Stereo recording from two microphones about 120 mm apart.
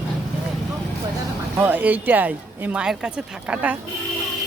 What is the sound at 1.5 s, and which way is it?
Speech, 15° right (ahead or behind).